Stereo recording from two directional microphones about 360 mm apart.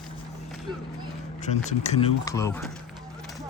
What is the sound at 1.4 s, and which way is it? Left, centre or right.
Speech, centre.